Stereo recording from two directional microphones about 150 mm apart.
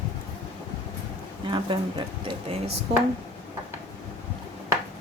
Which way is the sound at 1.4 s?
30° right (ahead or behind).